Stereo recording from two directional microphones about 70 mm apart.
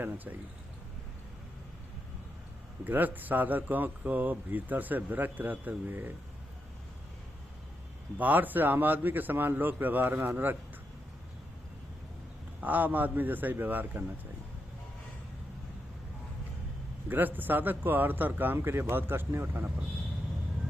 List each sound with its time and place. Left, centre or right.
0.0 s a man's voice: right
2.8 s a man's voice: right
8.2 s a man's voice: right
12.5 s a man's voice: right
17.1 s a man's voice: right